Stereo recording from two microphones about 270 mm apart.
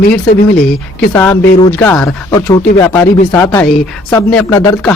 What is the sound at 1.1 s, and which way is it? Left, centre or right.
Speech, centre.